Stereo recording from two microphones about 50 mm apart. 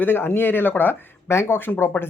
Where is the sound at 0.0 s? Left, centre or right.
Left.